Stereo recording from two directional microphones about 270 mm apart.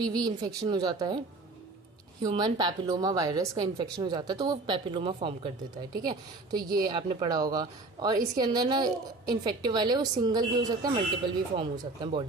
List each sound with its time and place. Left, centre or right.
0.0 s a woman's voice: centre
2.2 s a woman's voice: centre